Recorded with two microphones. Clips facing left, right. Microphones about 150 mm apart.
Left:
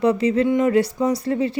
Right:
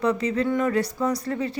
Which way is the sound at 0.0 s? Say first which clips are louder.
Left 5 dB; 30° left (ahead or behind).